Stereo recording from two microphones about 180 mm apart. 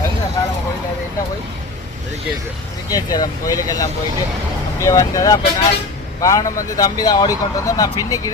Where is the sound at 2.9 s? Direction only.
20° left (ahead or behind).